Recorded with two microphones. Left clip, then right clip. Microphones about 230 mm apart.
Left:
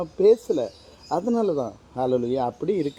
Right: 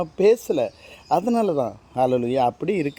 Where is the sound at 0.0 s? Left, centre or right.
Right.